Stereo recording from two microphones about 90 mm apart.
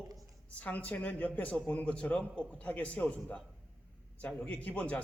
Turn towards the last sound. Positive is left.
turn(degrees=15)  # may be behind; listen again after turning